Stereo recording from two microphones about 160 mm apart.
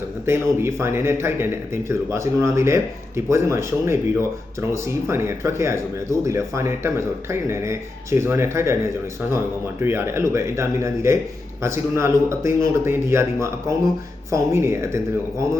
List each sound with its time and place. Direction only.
0.3 s speech: 15° right (ahead or behind)
9.8 s speech: 15° right (ahead or behind)